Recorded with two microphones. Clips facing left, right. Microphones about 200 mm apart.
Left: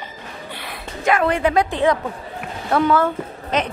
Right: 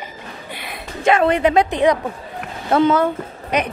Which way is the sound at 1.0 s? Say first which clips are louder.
Right 3 dB; 25° right (ahead or behind).